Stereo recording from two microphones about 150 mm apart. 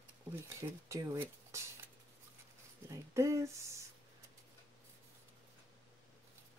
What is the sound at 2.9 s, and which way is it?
Speech, 20° right (ahead or behind).